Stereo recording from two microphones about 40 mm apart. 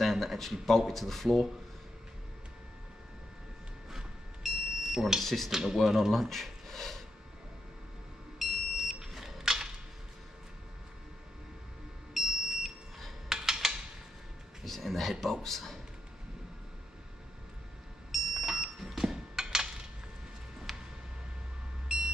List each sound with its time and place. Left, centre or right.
0.0 s speech: centre
3.9 s smoke detector: centre
5.2 s speech: centre
5.5 s speech: centre
6.1 s a sound: centre
8.4 s smoke detector: centre
12.1 s smoke detector: centre
14.6 s speech: centre
18.1 s a sound: centre
20.7 s a sound: centre
21.9 s vehicle: centre